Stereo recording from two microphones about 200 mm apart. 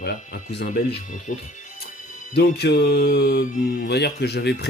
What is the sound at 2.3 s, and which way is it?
Speech, 55° left (ahead or behind).